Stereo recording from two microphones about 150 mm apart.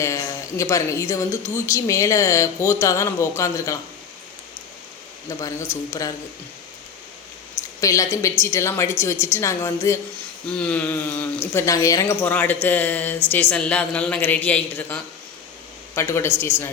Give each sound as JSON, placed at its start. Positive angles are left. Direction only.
{"t": 0.0, "sound": "speech", "side_deg": 20}
{"t": 5.3, "sound": "speech", "side_deg": 20}
{"t": 7.8, "sound": "speech", "side_deg": 20}
{"t": 10.5, "sound": "speech", "side_deg": 5}
{"t": 12.2, "sound": "speech", "side_deg": 10}